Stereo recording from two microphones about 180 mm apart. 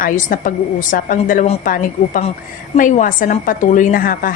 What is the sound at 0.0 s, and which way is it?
Speech, 50° left (ahead or behind).